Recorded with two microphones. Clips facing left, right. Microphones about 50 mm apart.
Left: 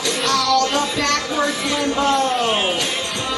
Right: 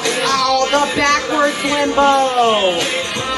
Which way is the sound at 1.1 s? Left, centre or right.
Right.